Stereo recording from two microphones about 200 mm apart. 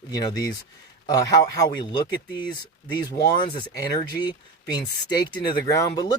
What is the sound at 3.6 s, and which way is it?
Speech, 20° left (ahead or behind).